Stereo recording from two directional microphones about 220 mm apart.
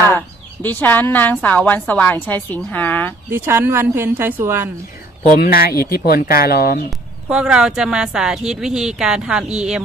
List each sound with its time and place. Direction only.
0.6 s a woman's voice: 10° left (ahead or behind)
3.2 s a woman's voice: 10° right (ahead or behind)
5.4 s speech: 45° left (ahead or behind)
7.3 s a woman's voice: 5° right (ahead or behind)